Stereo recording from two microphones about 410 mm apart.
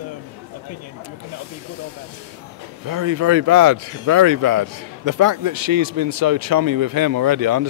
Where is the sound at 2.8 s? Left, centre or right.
Right.